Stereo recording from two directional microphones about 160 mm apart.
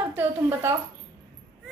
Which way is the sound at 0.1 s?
15° right (ahead or behind).